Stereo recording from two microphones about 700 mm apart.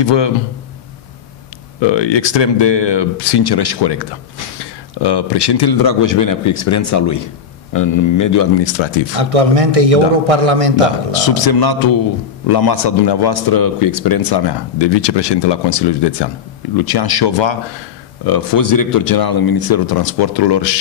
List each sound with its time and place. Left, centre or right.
0.0 s a man's voice: left
1.8 s a man's voice: left
9.2 s a man's voice: right
11.1 s a man's voice: left